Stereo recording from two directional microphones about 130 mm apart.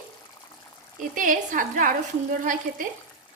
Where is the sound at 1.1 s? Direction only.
90° right.